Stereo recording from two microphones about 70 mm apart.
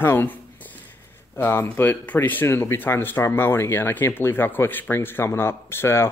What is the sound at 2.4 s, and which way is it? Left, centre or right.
Speech, left.